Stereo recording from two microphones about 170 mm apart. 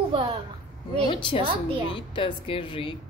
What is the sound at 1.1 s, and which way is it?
A woman's voice, 30° left (ahead or behind).